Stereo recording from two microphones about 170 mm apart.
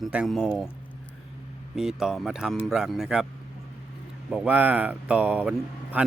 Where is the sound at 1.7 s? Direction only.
5° right (ahead or behind).